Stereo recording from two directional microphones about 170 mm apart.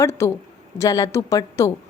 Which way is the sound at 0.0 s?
15° left (ahead or behind).